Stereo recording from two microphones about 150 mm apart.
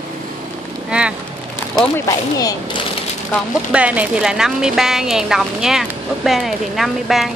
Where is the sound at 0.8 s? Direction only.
5° right (ahead or behind).